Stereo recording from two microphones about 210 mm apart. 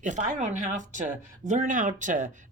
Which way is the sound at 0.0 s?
35° right (ahead or behind).